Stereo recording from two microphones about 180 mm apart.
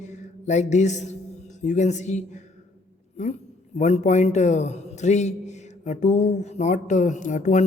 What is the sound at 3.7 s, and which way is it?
A man's voice, 40° left (ahead or behind).